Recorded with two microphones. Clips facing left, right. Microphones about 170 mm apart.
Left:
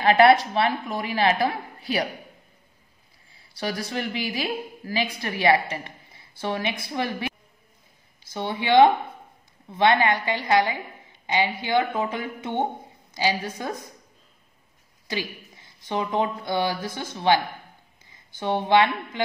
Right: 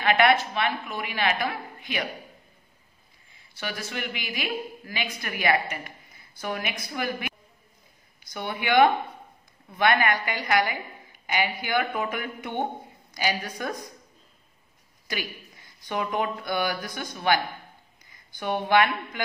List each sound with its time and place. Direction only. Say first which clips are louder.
0.0 s a woman's voice: left 5 dB; 35° left (ahead or behind)
3.3 s a woman's voice: left 5 dB; 35° left (ahead or behind)
15.0 s a woman's voice: left 3 dB; 25° left (ahead or behind)